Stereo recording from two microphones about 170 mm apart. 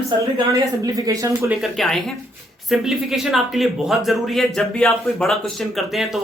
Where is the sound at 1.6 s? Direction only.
Centre (ahead or behind).